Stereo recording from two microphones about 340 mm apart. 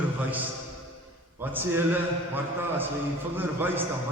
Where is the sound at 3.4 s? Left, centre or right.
Centre.